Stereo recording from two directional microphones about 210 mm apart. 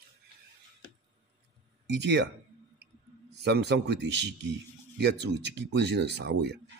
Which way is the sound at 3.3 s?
55° right (ahead or behind).